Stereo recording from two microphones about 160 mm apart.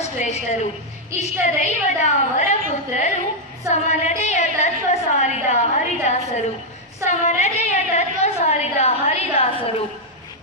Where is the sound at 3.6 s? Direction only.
45° left (ahead or behind).